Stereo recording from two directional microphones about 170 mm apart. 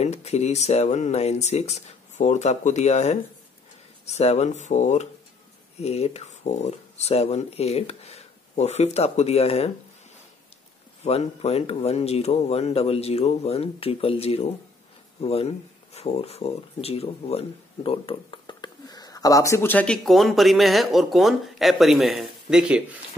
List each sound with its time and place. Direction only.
0.0 s speech: 40° left (ahead or behind)
11.1 s speech: 35° left (ahead or behind); by 22.9 s 5° right (ahead or behind)